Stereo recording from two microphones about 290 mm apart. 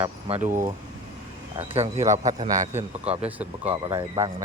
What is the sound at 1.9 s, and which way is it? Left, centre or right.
Speech, centre.